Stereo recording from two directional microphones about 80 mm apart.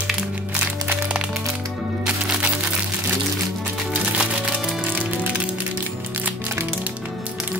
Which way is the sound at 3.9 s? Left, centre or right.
Centre.